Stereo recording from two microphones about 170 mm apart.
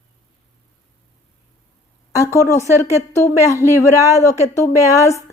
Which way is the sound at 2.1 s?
15° left (ahead or behind).